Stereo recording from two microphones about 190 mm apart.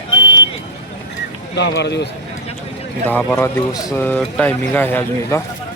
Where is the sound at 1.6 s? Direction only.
65° left (ahead or behind).